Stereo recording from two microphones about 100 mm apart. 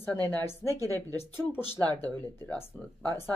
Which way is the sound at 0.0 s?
15° left (ahead or behind).